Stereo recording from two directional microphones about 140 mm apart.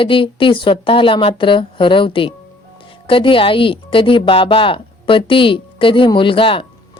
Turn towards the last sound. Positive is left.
turn(degrees=40)  # may be behind; listen again after turning